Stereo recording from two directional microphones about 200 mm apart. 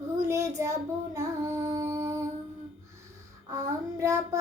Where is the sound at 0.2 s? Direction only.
15° right (ahead or behind).